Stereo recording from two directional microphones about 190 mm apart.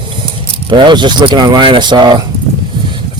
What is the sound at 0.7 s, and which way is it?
Speech, 25° right (ahead or behind).